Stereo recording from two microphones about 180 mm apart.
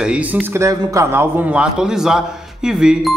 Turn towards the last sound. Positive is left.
turn(degrees=-5)  # may be behind; listen again after turning